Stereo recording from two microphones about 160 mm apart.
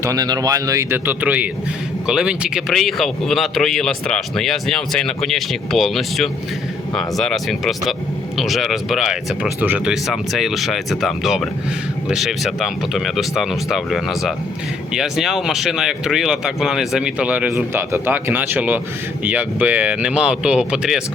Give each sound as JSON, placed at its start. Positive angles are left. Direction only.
{"t": 0.0, "sound": "speech", "side_deg": -20}